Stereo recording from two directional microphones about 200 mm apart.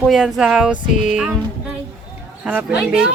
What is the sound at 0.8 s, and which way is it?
Music, 40° left (ahead or behind).